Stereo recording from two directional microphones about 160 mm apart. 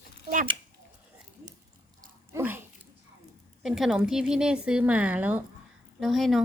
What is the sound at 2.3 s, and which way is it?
A woman's voice, 15° right (ahead or behind).